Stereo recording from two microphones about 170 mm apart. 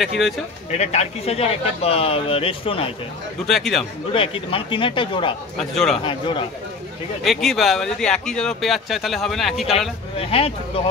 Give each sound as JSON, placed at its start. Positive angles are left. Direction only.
{"t": 0.7, "sound": "speech", "side_deg": 40}
{"t": 3.4, "sound": "speech", "side_deg": 0}
{"t": 4.1, "sound": "speech", "side_deg": 30}
{"t": 5.6, "sound": "speech", "side_deg": 5}
{"t": 6.0, "sound": "a man's voice", "side_deg": 30}
{"t": 7.2, "sound": "speech", "side_deg": 0}
{"t": 9.7, "sound": "speech", "side_deg": 35}